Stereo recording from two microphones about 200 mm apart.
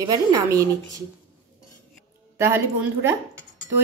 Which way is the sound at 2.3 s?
15° right (ahead or behind).